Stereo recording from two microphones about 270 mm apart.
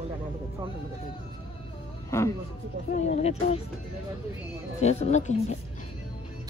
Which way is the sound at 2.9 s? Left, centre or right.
Left.